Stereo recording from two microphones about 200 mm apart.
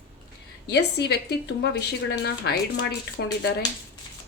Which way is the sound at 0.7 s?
55° left (ahead or behind).